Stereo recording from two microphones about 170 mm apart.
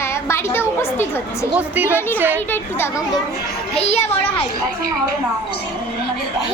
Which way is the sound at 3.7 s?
35° left (ahead or behind).